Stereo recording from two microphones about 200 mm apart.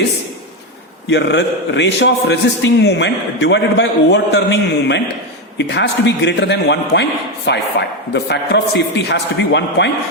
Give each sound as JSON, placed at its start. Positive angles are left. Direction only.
{"t": 1.1, "sound": "a man's voice", "side_deg": 60}